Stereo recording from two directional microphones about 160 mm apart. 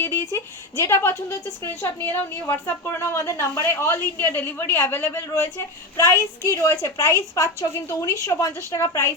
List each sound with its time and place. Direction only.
0.0 s a woman's voice: 15° left (ahead or behind)